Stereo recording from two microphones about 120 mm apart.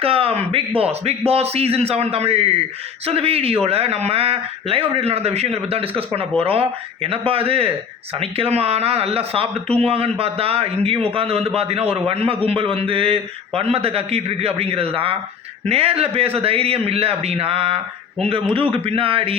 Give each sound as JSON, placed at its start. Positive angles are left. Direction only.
{"t": 0.0, "sound": "a man's voice", "side_deg": -55}